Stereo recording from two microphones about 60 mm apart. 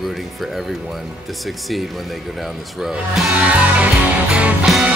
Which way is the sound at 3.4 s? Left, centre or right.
Right.